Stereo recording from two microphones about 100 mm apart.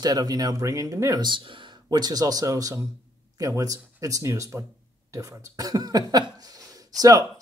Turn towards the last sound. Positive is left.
turn(degrees=-35)  # may be behind; listen again after turning